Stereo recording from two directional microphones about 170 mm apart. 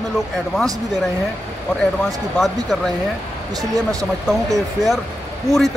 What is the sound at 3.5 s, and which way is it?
Speech, 20° right (ahead or behind).